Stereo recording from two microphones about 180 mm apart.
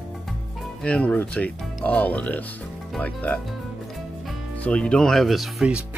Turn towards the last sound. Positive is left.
turn(degrees=-5)  # may be behind; listen again after turning